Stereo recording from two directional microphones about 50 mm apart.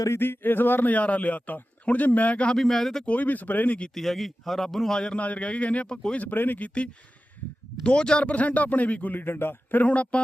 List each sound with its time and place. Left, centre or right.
0.2 s a man's voice: left
2.6 s speech: centre
3.1 s a man's voice: left
3.9 s speech: centre
4.9 s speech: centre
5.2 s a man's voice: left
6.1 s a man's voice: left
7.9 s a man's voice: centre; by 9.8 s left
9.8 s a man's voice: left